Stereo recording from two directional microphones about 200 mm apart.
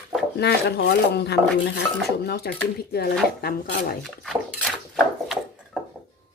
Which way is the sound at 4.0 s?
Centre (ahead or behind).